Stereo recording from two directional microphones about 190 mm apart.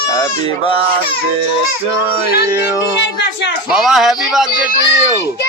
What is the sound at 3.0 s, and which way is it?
Speech, 70° left (ahead or behind).